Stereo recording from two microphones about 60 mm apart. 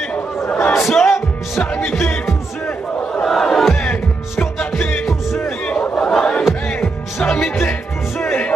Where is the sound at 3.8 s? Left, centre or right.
Left.